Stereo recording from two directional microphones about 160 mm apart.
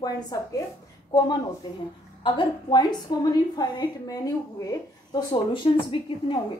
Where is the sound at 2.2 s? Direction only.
30° left (ahead or behind).